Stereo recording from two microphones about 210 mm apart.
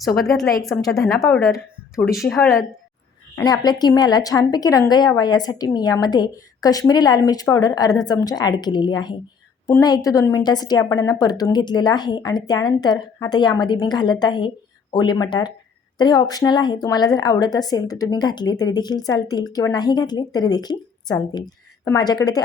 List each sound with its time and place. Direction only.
0.2 s a woman's voice: centre (ahead or behind)
1.5 s speech: 15° left (ahead or behind)
2.1 s a woman's voice: centre (ahead or behind)
3.3 s a woman's voice: 20° left (ahead or behind)